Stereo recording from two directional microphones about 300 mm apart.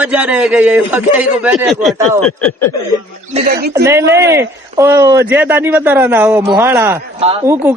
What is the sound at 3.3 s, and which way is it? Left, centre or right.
Speech, right.